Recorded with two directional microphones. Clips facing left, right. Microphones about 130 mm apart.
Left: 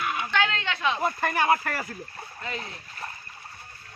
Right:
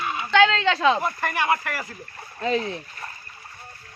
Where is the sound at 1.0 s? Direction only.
25° left (ahead or behind).